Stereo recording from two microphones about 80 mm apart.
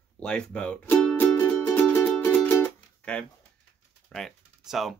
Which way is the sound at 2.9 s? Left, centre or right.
Centre.